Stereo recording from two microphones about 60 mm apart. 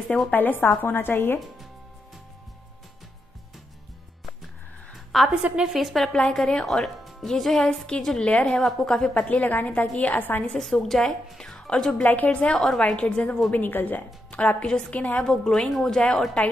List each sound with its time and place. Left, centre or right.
0.3 s a woman's voice: left
4.9 s a sound: centre
5.3 s a woman's voice: centre
5.7 s a woman's voice: centre
6.1 s a woman's voice: centre
9.1 s a woman's voice: left
10.4 s a woman's voice: centre
12.0 s a woman's voice: left
13.5 s a woman's voice: left
15.2 s a woman's voice: centre